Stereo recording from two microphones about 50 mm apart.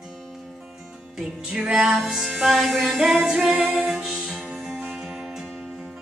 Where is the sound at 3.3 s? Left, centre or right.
Centre.